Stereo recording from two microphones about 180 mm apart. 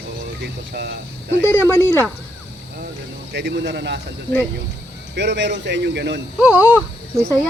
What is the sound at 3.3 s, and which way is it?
Speech, 70° right (ahead or behind).